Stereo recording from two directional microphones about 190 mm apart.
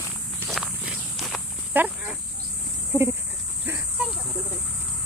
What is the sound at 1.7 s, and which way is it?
Speech, 10° right (ahead or behind).